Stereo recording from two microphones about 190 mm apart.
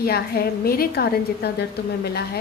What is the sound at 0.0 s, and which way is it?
A woman's voice, 55° left (ahead or behind).